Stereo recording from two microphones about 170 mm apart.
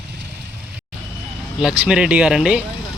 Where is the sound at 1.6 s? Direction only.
5° right (ahead or behind).